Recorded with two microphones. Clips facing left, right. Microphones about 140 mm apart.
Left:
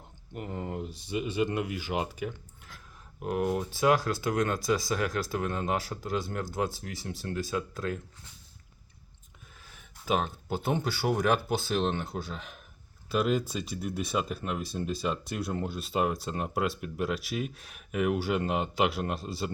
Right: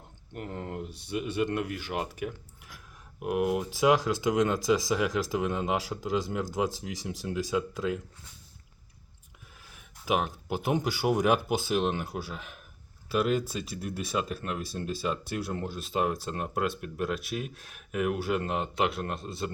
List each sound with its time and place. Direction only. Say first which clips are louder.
0.3 s speech: left 1 dB; 5° left (ahead or behind); by 8.0 s 15° right (ahead or behind)
10.1 s speech: right 1 dB; 10° right (ahead or behind)